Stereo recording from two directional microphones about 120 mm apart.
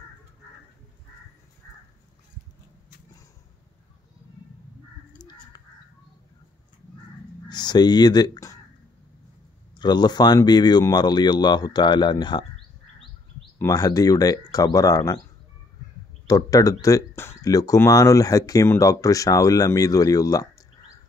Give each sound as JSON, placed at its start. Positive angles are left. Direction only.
{"t": 5.2, "sound": "goose", "side_deg": 35}
{"t": 7.4, "sound": "speech", "side_deg": 35}
{"t": 9.8, "sound": "speech", "side_deg": 35}
{"t": 13.6, "sound": "speech", "side_deg": 30}
{"t": 16.3, "sound": "speech", "side_deg": 30}